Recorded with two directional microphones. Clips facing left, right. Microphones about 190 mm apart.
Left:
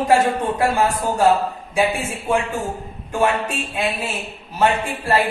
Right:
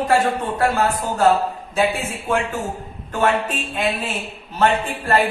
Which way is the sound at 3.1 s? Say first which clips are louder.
Even; 10° left (ahead or behind).